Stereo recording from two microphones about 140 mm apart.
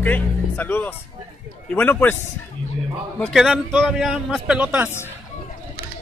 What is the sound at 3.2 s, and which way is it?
A man's voice, centre (ahead or behind).